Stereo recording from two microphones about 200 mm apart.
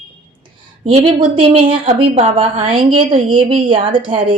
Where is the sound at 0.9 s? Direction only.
30° right (ahead or behind).